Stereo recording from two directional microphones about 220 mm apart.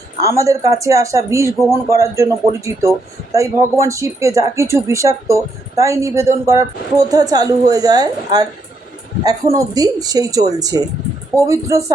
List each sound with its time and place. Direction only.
0.2 s speech: 15° right (ahead or behind)